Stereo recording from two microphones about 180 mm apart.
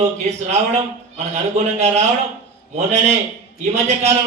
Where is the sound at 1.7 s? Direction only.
35° right (ahead or behind).